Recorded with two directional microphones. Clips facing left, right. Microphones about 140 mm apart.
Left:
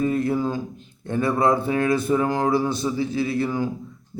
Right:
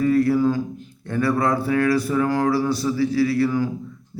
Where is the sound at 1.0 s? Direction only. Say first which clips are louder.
Even; 20° left (ahead or behind).